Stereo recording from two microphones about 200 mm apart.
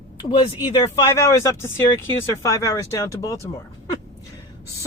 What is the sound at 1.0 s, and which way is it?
Speech, 15° left (ahead or behind).